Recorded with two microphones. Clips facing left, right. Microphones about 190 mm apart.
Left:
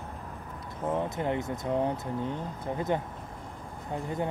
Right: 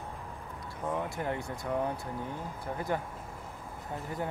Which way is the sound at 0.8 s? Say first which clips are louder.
Left 4 dB; 20° left (ahead or behind).